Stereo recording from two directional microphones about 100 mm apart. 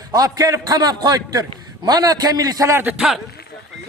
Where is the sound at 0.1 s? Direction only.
40° right (ahead or behind).